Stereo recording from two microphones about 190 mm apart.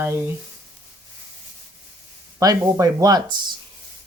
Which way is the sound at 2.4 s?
20° right (ahead or behind).